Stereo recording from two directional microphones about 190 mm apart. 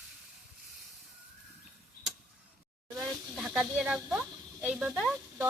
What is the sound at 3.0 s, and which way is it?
Speech, centre (ahead or behind).